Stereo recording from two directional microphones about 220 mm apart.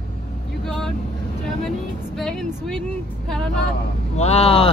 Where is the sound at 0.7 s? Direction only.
Centre (ahead or behind).